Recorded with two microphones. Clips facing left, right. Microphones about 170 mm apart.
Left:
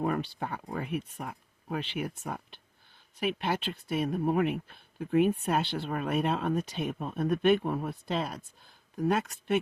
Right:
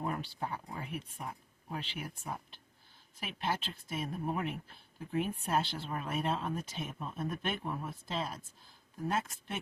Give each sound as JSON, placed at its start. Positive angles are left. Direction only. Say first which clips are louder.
{"t": 0.0, "sound": "speech", "louder": "left 6 dB", "side_deg": 70}